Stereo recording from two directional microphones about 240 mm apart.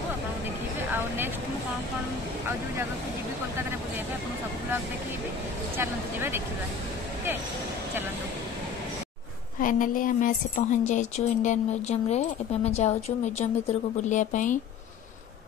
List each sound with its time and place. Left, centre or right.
0.9 s vehicle: centre
5.8 s speech: centre
9.6 s speech: left